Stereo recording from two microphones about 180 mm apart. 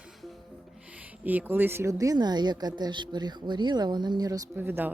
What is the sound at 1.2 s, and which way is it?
A woman's voice, 10° right (ahead or behind).